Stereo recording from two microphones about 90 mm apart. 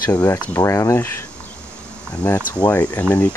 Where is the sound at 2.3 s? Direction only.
20° left (ahead or behind).